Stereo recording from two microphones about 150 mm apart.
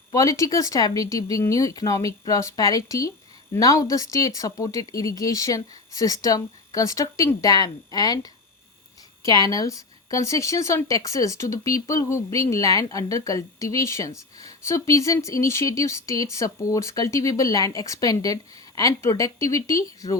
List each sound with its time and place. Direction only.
0.1 s a woman's voice: 20° left (ahead or behind)